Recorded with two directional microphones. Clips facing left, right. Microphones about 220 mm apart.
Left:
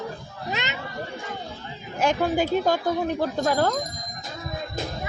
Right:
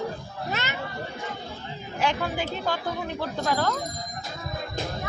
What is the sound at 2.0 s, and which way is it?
A woman's voice, 45° left (ahead or behind).